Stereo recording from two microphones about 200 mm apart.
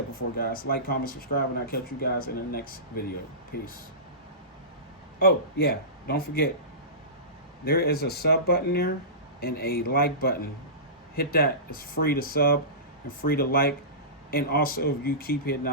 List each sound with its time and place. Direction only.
0.3 s speech: 45° left (ahead or behind)
5.2 s speech: 50° left (ahead or behind)
7.6 s speech: 50° left (ahead or behind)